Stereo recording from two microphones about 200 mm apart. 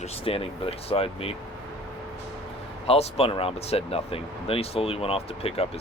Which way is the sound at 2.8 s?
30° left (ahead or behind).